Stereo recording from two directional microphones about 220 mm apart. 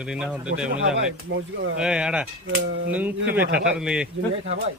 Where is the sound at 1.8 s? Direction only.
5° right (ahead or behind).